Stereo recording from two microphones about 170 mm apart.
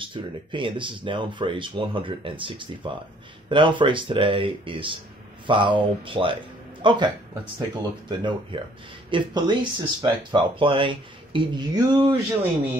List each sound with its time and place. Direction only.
0.0 s speech: 30° right (ahead or behind)